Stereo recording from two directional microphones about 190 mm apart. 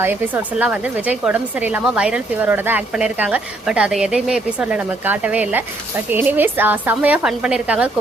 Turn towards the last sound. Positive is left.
turn(degrees=-5)  # may be behind; listen again after turning